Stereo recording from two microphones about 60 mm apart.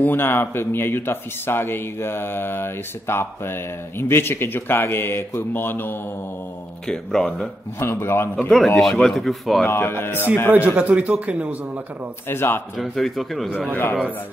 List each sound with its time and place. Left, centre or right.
0.0 s speech: left
6.9 s speech: centre
7.8 s a man's voice: left
8.4 s speech: centre
9.7 s speech: left
10.5 s a man's voice: right
12.3 s speech: left
12.7 s speech: centre